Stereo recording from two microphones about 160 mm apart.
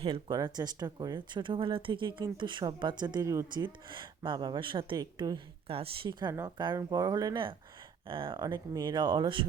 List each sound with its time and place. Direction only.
0.0 s speech: 35° right (ahead or behind)
5.6 s speech: 35° right (ahead or behind)